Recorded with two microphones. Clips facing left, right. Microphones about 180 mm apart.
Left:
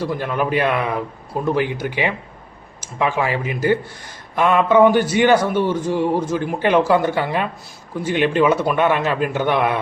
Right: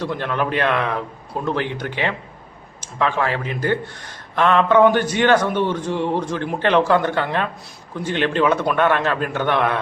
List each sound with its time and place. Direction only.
0.0 s a man's voice: 5° left (ahead or behind)